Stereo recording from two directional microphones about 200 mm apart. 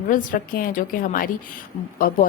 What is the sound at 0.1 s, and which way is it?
Speech, 40° left (ahead or behind).